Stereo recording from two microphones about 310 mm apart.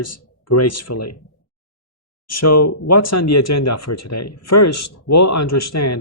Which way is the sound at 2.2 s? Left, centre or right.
Left.